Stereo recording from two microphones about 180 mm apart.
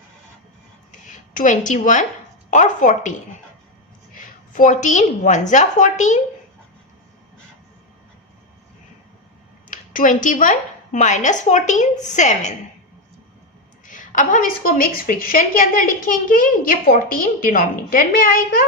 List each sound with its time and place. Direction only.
0.9 s a sound: 45° left (ahead or behind)
2.5 s a woman's voice: 45° left (ahead or behind)
9.6 s a woman's voice: 45° left (ahead or behind)
13.8 s a woman's voice: 45° left (ahead or behind)